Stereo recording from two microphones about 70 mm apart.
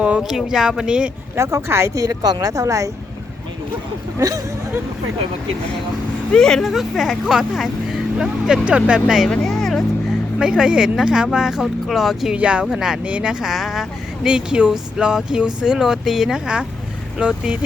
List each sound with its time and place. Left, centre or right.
0.2 s speech: centre
1.4 s speech: right
2.0 s speech: right
4.2 s speech: right
6.3 s speech: centre
9.3 s music: centre
10.3 s speech: centre
12.4 s speech: centre
13.5 s speech: centre
14.3 s speech: centre